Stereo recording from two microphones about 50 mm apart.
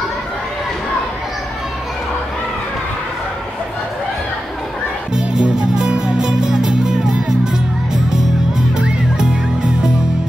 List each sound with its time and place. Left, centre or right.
5.1 s music: centre
8.7 s music: centre